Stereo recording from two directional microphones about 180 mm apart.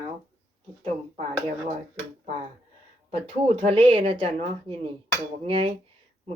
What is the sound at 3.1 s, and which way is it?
Speech, 30° right (ahead or behind).